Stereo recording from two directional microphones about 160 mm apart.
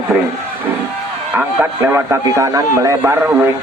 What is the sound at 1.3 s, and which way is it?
Speech, 15° right (ahead or behind).